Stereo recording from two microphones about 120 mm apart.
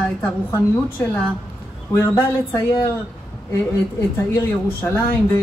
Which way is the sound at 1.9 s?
25° left (ahead or behind).